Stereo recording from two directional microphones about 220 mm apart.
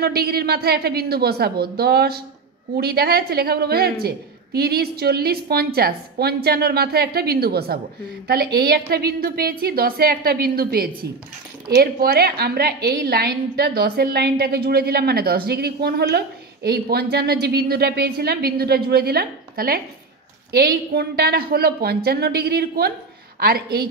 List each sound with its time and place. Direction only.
0.0 s a woman's voice: 45° right (ahead or behind)